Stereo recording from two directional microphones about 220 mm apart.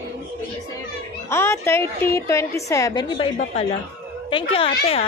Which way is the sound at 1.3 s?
10° left (ahead or behind).